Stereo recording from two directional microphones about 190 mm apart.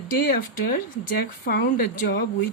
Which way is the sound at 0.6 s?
50° left (ahead or behind).